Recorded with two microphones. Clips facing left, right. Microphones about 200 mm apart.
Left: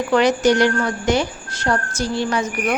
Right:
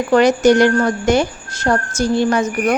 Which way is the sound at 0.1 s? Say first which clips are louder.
Right 4 dB; 45° right (ahead or behind).